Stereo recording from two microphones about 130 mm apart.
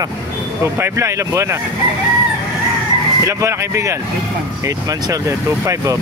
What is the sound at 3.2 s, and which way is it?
Speech, 25° right (ahead or behind).